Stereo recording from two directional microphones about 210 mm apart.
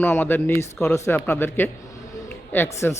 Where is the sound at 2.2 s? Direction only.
10° left (ahead or behind).